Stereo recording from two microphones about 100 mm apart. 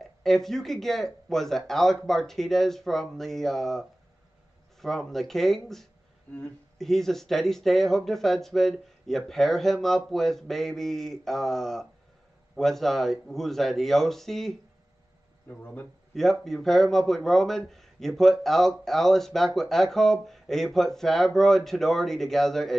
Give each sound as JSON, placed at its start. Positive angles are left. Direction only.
{"t": 0.0, "sound": "speech", "side_deg": 5}
{"t": 4.8, "sound": "speech", "side_deg": 0}
{"t": 6.3, "sound": "speech", "side_deg": 15}
{"t": 6.8, "sound": "speech", "side_deg": 5}
{"t": 15.5, "sound": "speech", "side_deg": 15}
{"t": 16.2, "sound": "speech", "side_deg": 5}